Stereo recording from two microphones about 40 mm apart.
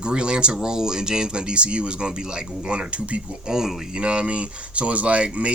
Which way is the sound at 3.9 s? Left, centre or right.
Right.